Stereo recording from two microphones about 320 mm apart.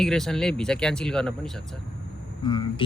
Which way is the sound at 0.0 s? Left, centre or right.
Centre.